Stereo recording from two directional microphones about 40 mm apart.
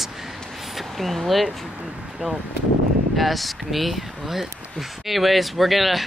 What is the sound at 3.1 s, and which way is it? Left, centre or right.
Speech, centre.